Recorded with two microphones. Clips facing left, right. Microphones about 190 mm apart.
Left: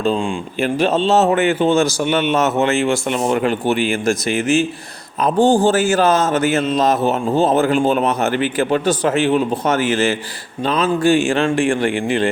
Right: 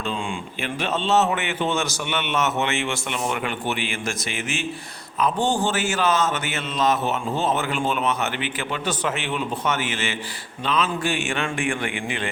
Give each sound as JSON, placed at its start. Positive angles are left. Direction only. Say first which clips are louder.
{"t": 0.6, "sound": "speech", "louder": "left 10 dB", "side_deg": 35}